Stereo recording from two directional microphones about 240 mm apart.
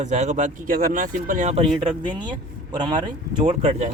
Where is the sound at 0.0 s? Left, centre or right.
Right.